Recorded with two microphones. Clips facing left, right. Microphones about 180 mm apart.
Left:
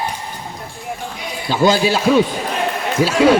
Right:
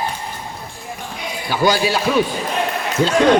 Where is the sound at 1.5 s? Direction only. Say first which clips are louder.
Left 3 dB; 25° left (ahead or behind).